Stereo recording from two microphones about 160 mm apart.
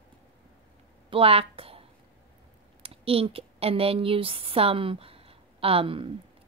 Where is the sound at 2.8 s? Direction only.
35° right (ahead or behind).